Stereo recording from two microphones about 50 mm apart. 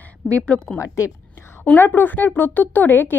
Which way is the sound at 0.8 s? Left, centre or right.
Left.